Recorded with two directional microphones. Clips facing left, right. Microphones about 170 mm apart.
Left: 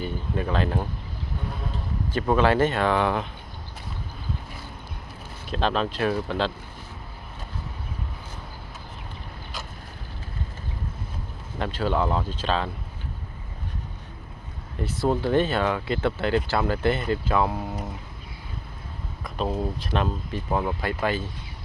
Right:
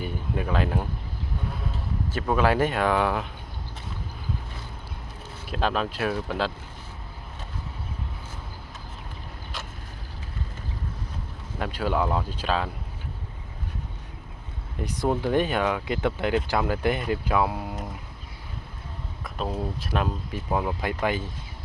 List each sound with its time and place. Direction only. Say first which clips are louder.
0.0 s speech: left 1 dB; 10° right (ahead or behind)
5.5 s speech: left 1 dB; 5° right (ahead or behind)
11.6 s speech: left 1 dB; 10° right (ahead or behind)
14.8 s speech: left 1 dB; 15° right (ahead or behind)
19.2 s speech: left 3 dB; centre (ahead or behind)
21.0 s speech: even; 15° right (ahead or behind)